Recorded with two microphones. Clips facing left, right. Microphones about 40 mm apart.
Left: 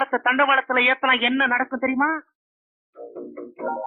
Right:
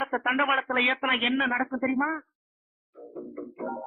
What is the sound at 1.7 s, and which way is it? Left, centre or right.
Speech, centre.